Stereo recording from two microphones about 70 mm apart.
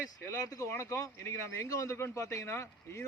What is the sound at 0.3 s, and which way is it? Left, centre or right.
Speech, left.